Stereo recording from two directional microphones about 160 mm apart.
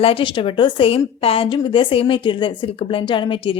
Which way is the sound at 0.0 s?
35° left (ahead or behind).